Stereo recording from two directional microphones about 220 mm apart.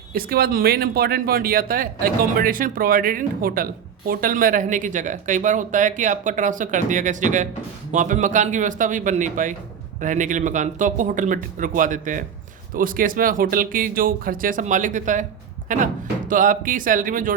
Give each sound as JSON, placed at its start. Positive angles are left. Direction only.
{"t": 0.1, "sound": "speech", "side_deg": -40}